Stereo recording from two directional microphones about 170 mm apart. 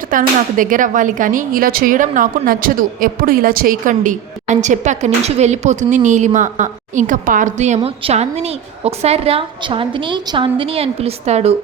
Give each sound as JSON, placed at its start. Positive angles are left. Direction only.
{"t": 0.1, "sound": "speech", "side_deg": -55}
{"t": 7.8, "sound": "a woman's voice", "side_deg": -35}